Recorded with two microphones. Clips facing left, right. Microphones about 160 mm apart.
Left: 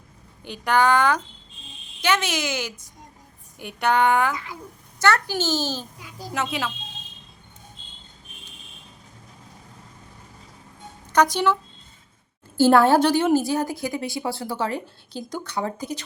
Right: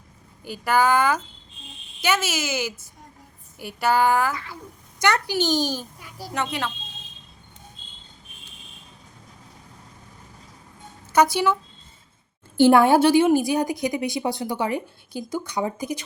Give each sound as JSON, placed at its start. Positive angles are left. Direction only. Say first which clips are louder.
{"t": 0.4, "sound": "a woman's voice", "louder": "even", "side_deg": -5}
{"t": 4.9, "sound": "a woman's voice", "louder": "even", "side_deg": -15}
{"t": 6.3, "sound": "speech", "louder": "even", "side_deg": 5}
{"t": 11.1, "sound": "speech", "louder": "right 1 dB", "side_deg": -10}
{"t": 12.5, "sound": "a woman's voice", "louder": "right 1 dB", "side_deg": -15}